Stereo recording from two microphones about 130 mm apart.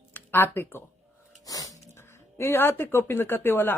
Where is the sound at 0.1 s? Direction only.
15° left (ahead or behind).